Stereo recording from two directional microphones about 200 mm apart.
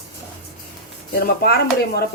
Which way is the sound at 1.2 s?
50° left (ahead or behind).